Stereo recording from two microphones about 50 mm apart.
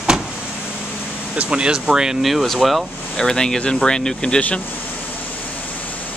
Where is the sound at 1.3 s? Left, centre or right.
Centre.